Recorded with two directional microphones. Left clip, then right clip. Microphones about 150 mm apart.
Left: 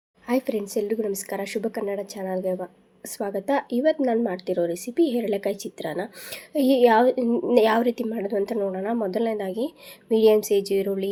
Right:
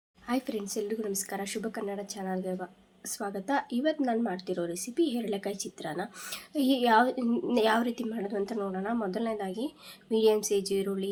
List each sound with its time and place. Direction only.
0.3 s a woman's voice: 15° left (ahead or behind)